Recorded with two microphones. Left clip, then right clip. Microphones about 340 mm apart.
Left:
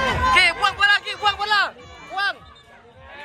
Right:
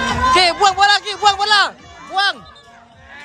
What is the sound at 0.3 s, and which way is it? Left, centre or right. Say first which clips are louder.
Music: right 5 dB; centre.